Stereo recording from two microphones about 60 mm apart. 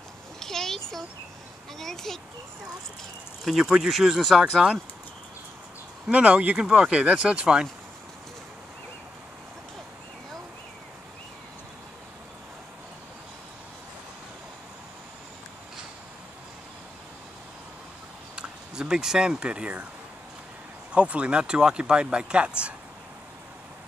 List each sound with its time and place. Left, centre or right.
0.4 s a sound: centre
1.8 s a child's voice: centre
3.4 s speech: centre
6.0 s speech: right
18.3 s speech: centre
20.9 s speech: centre